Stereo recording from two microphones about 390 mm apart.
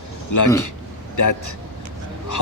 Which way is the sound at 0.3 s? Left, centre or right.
Left.